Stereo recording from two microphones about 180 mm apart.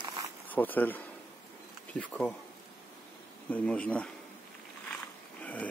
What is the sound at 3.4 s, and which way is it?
Speech, 5° left (ahead or behind).